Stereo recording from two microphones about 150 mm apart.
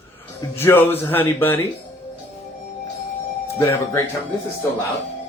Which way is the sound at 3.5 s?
20° left (ahead or behind).